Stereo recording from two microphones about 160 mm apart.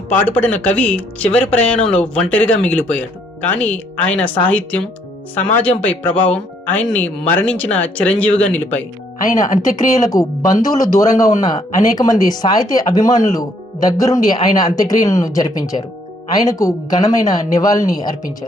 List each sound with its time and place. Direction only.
0.1 s speech: 10° left (ahead or behind)
10.2 s speech: 25° left (ahead or behind)